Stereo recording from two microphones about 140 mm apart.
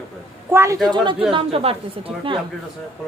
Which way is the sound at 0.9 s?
35° right (ahead or behind).